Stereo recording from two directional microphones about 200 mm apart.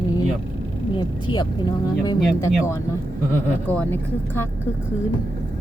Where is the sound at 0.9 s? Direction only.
20° left (ahead or behind).